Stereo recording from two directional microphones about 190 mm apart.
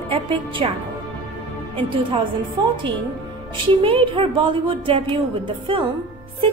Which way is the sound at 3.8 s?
25° right (ahead or behind).